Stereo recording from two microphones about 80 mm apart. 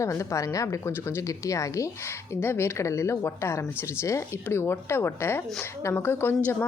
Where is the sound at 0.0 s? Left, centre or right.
Left.